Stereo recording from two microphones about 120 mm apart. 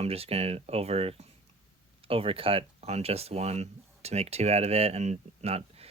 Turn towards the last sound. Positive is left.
turn(degrees=-60)  # may be behind; listen again after turning